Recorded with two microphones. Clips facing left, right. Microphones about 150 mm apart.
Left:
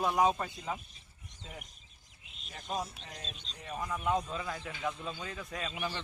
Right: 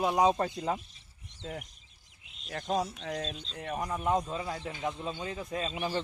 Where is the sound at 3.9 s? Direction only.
25° right (ahead or behind).